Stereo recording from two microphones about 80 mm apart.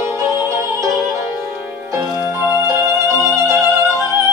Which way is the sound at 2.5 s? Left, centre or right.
Right.